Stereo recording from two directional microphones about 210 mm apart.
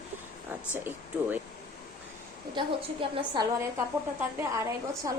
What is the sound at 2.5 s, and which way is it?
A woman's voice, 20° right (ahead or behind).